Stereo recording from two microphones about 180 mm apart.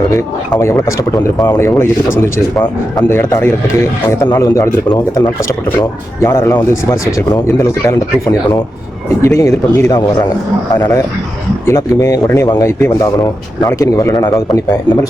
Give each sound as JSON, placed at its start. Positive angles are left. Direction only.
{"t": 0.1, "sound": "a man's voice", "side_deg": 15}